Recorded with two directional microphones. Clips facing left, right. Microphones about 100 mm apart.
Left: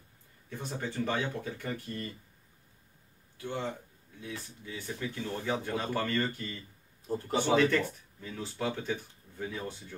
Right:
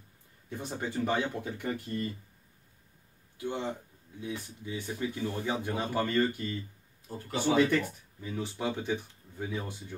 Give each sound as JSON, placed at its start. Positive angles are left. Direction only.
{"t": 0.5, "sound": "speech", "side_deg": -15}
{"t": 3.3, "sound": "speech", "side_deg": -15}
{"t": 7.5, "sound": "speech", "side_deg": -15}